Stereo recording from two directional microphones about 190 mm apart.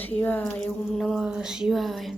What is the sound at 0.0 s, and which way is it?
Speech, 10° left (ahead or behind).